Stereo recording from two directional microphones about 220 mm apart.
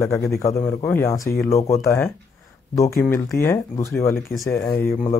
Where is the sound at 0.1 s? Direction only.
15° left (ahead or behind).